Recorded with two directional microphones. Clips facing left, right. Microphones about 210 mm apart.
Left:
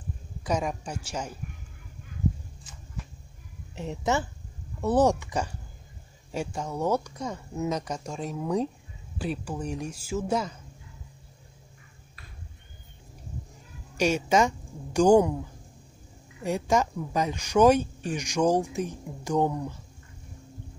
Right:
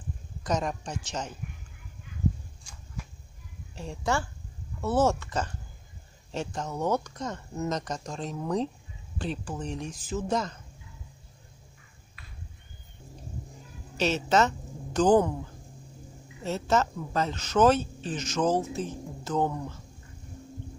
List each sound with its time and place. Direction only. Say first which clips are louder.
0.4 s speech: left 1 dB; 10° left (ahead or behind)
3.7 s a woman's voice: left 2 dB; 20° left (ahead or behind)
13.9 s speech: left 2 dB; 10° left (ahead or behind)
16.4 s speech: left 1 dB; 15° left (ahead or behind)